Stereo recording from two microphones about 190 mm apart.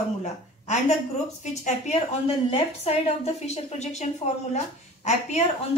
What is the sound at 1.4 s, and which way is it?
A woman's voice, 35° left (ahead or behind).